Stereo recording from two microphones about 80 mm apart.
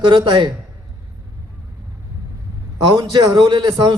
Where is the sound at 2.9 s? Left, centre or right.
Right.